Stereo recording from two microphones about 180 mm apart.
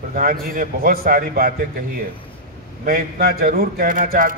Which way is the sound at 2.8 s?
55° right (ahead or behind).